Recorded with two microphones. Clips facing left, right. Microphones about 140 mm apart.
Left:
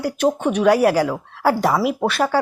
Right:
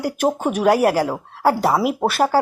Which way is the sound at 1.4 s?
Centre (ahead or behind).